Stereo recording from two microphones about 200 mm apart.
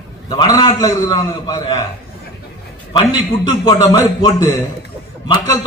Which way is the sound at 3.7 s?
15° left (ahead or behind).